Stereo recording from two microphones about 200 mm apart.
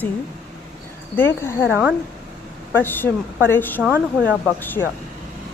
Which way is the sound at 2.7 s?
10° left (ahead or behind).